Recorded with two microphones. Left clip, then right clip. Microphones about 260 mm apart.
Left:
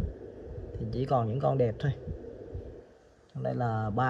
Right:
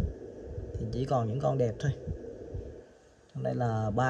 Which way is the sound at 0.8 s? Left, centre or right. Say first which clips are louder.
Left 2 dB; centre.